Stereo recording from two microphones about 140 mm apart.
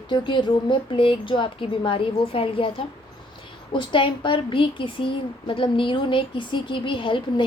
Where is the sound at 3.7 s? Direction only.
35° left (ahead or behind).